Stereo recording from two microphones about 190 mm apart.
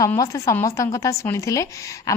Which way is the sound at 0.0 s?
15° left (ahead or behind).